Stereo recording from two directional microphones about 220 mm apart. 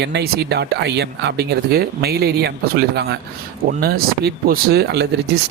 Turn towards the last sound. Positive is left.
turn(degrees=-50)  # may be behind; listen again after turning